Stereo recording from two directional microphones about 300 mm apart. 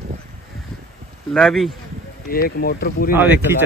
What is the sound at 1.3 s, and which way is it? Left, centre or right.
Speech, centre.